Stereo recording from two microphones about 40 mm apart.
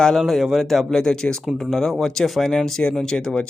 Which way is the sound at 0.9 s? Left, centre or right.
Centre.